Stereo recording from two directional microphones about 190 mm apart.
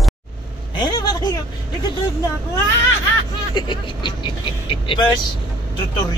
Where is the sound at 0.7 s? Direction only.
20° left (ahead or behind).